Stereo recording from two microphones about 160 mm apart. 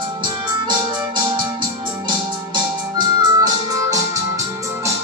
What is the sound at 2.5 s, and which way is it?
Music, 25° right (ahead or behind).